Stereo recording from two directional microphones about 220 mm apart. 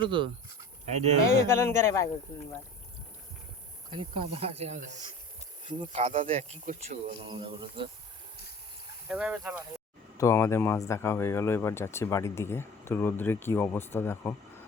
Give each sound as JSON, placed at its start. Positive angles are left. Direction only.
{"t": 0.0, "sound": "speech", "side_deg": -20}
{"t": 1.2, "sound": "speech", "side_deg": 10}
{"t": 3.8, "sound": "speech", "side_deg": -25}
{"t": 9.0, "sound": "speech", "side_deg": -5}
{"t": 10.2, "sound": "speech", "side_deg": 15}